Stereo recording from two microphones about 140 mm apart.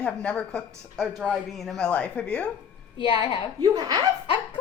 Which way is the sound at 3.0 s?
35° left (ahead or behind).